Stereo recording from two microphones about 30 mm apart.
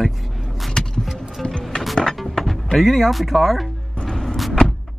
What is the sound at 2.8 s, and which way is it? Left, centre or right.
Speech, centre.